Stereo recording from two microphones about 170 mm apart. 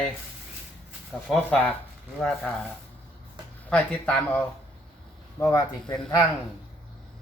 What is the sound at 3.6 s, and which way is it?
Speech, 10° left (ahead or behind).